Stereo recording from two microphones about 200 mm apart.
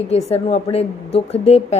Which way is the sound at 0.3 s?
30° left (ahead or behind).